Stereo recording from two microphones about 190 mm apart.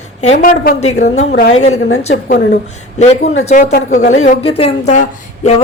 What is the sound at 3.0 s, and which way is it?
A man's voice, 35° left (ahead or behind).